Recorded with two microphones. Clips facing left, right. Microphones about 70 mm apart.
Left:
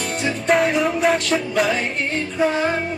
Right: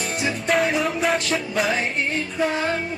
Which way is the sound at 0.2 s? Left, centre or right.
Centre.